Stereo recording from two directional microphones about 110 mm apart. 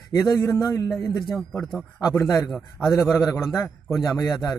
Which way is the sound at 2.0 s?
25° left (ahead or behind).